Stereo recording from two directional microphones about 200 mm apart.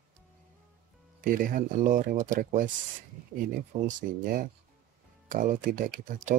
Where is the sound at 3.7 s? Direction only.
40° right (ahead or behind).